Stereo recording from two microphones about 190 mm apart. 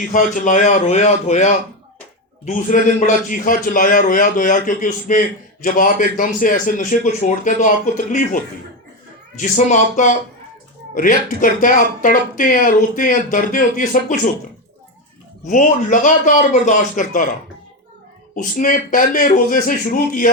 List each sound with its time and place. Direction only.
0.1 s speech: 45° left (ahead or behind)
9.4 s speech: 40° left (ahead or behind)
15.4 s speech: 40° left (ahead or behind)
18.3 s speech: 45° left (ahead or behind)